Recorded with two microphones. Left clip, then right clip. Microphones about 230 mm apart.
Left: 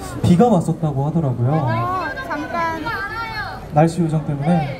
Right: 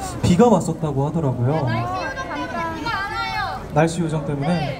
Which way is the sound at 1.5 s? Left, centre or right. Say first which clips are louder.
Left 4 dB; right.